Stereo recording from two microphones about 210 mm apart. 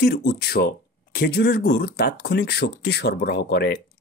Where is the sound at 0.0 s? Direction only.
45° left (ahead or behind).